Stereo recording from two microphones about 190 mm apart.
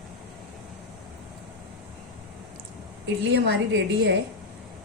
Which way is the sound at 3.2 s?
65° right (ahead or behind).